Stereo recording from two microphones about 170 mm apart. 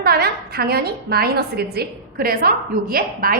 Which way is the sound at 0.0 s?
65° right (ahead or behind).